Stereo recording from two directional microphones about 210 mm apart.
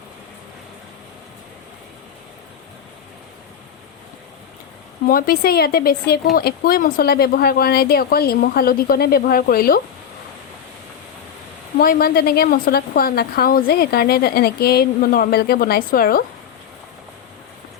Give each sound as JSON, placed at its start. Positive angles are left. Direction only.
{"t": 5.0, "sound": "a woman's voice", "side_deg": 45}
{"t": 11.8, "sound": "a woman's voice", "side_deg": 45}